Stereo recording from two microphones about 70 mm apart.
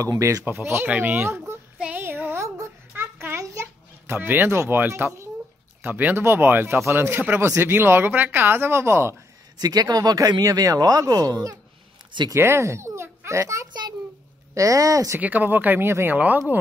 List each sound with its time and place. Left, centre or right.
0.2 s speech: right
0.8 s speech: right
2.0 s a sound: right
2.3 s a sound: right
4.1 s speech: right
5.8 s speech: right
9.6 s speech: right
12.4 s a child's voice: right
15.1 s speech: right
16.2 s speech: right